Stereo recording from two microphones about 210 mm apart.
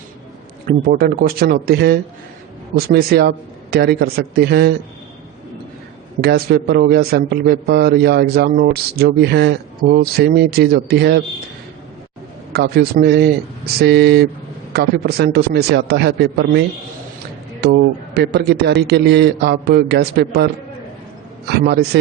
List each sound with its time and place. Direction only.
0.9 s a man's voice: 45° right (ahead or behind)
6.2 s a man's voice: 50° right (ahead or behind)
12.5 s a man's voice: 50° right (ahead or behind)
21.5 s a man's voice: 50° right (ahead or behind)